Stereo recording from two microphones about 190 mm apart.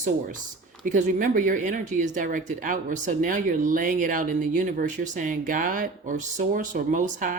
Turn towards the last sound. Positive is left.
turn(degrees=-45)  # may be behind; listen again after turning